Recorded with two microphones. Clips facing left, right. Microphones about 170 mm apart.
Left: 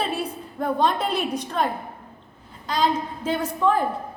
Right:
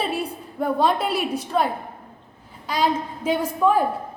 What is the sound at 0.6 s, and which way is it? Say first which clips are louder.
A woman's voice: right 2 dB; 5° right (ahead or behind).